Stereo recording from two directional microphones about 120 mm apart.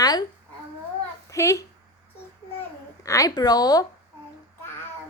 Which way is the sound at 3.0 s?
25° left (ahead or behind).